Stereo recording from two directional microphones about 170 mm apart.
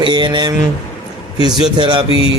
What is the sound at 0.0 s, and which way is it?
Speech, 25° right (ahead or behind).